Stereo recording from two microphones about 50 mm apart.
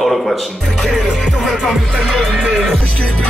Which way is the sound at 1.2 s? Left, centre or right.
Centre.